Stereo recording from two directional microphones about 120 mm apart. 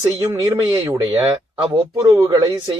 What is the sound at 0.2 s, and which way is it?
Speech, 30° right (ahead or behind).